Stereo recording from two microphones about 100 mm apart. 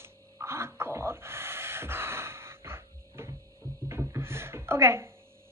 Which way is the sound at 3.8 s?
25° right (ahead or behind).